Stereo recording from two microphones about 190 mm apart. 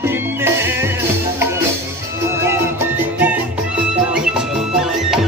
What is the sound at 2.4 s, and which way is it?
Music, 15° right (ahead or behind).